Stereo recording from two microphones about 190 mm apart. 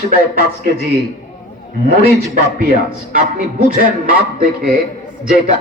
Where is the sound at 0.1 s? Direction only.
50° right (ahead or behind).